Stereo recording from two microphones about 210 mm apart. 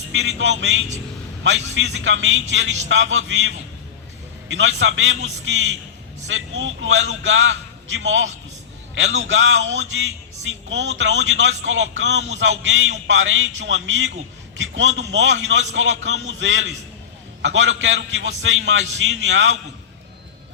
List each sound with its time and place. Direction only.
0.1 s speech: 65° right (ahead or behind)